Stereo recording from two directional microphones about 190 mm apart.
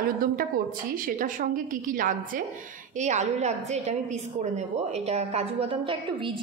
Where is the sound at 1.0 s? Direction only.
45° right (ahead or behind); by 6.3 s 30° right (ahead or behind).